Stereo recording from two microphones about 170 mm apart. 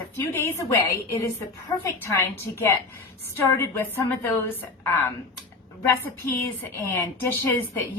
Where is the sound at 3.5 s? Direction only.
15° left (ahead or behind).